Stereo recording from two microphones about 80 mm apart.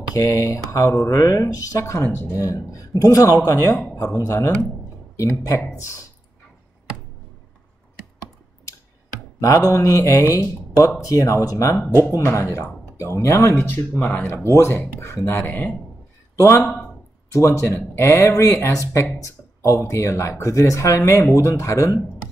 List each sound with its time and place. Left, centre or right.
0.1 s speech: left
9.4 s speech: left
16.3 s a man's voice: left